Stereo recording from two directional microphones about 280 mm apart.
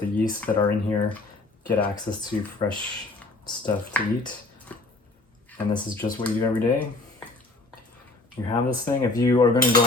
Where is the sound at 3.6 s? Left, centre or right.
Centre.